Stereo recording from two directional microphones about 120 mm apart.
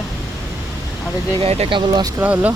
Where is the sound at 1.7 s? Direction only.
35° right (ahead or behind).